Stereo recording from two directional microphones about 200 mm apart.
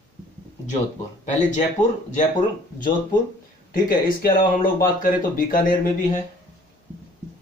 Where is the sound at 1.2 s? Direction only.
35° left (ahead or behind).